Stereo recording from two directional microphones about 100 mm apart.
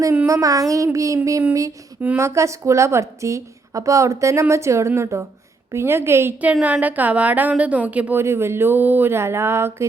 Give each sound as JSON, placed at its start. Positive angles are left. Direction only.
{"t": 0.3, "sound": "a sound", "side_deg": -35}
{"t": 2.1, "sound": "a woman's voice", "side_deg": -30}
{"t": 6.4, "sound": "a woman's voice", "side_deg": -15}
{"t": 8.2, "sound": "a woman's voice", "side_deg": -25}